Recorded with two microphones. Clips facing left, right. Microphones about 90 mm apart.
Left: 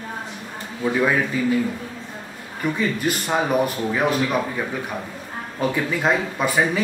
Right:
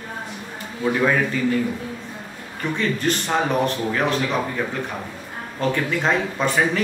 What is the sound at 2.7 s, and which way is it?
Speech, 10° left (ahead or behind).